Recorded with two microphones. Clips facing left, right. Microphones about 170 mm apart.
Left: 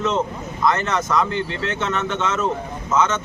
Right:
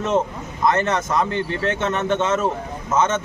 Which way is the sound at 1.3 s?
50° right (ahead or behind).